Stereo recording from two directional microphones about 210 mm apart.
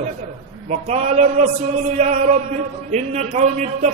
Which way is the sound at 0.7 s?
30° right (ahead or behind).